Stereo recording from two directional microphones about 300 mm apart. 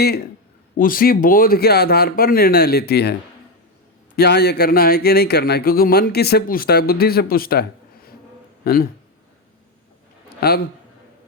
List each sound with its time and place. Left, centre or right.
0.8 s speech: left
10.4 s speech: left